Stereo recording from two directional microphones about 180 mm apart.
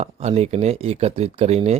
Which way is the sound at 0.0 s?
35° right (ahead or behind).